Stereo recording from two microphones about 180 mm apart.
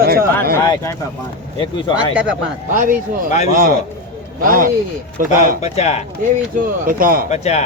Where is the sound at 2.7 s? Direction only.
50° right (ahead or behind).